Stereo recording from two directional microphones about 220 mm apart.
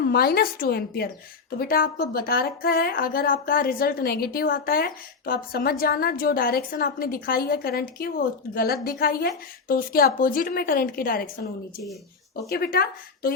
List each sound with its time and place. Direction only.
0.1 s a woman's voice: 45° left (ahead or behind)
12.5 s a woman's voice: 45° left (ahead or behind)